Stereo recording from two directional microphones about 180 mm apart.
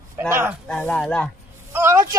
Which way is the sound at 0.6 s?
5° left (ahead or behind).